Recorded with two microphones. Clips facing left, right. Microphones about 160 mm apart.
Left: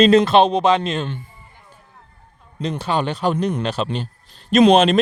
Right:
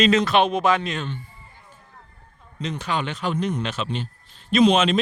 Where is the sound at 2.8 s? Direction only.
35° left (ahead or behind).